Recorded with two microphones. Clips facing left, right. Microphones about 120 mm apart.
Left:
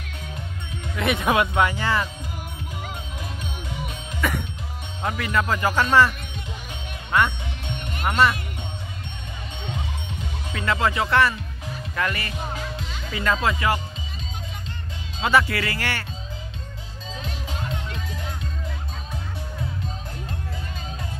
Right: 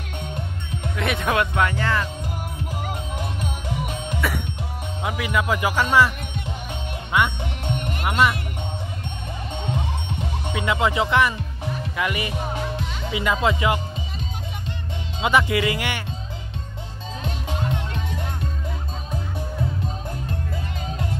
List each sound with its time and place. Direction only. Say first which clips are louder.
0.9 s speech: left 1 dB; centre (ahead or behind)
4.2 s music: left 1 dB; 5° right (ahead or behind)
5.0 s speech: even; 10° right (ahead or behind)
8.0 s speech: left 1 dB; 10° right (ahead or behind)
10.5 s speech: right 1 dB; 15° right (ahead or behind)
15.1 s speech: right 1 dB; 20° right (ahead or behind)